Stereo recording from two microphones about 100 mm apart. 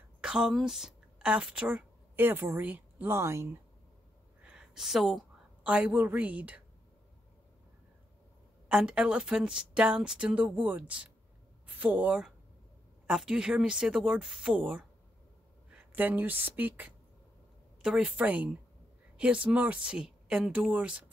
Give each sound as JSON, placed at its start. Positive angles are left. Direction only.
{"t": 0.2, "sound": "a woman's voice", "side_deg": -5}
{"t": 2.1, "sound": "a woman's voice", "side_deg": -20}
{"t": 4.5, "sound": "a sound", "side_deg": -5}
{"t": 5.6, "sound": "a woman's voice", "side_deg": -10}
{"t": 8.6, "sound": "a woman's voice", "side_deg": -10}
{"t": 15.7, "sound": "a woman's voice", "side_deg": -15}